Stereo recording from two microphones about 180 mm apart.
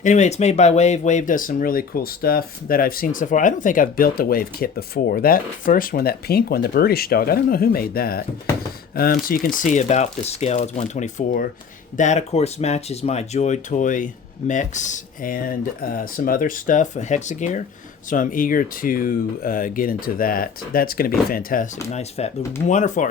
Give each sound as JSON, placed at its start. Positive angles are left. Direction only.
{"t": 0.0, "sound": "speech", "side_deg": 40}
{"t": 22.2, "sound": "speech", "side_deg": 35}